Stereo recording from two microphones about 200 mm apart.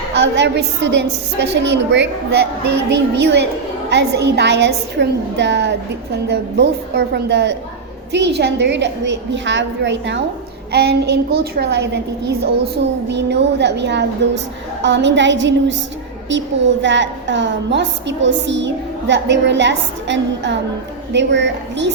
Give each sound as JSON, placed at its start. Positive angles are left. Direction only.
{"t": 0.1, "sound": "a woman's voice", "side_deg": -60}
{"t": 16.8, "sound": "a woman's voice", "side_deg": -65}